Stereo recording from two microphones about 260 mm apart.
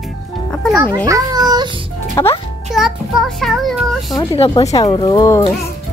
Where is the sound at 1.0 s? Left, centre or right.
Centre.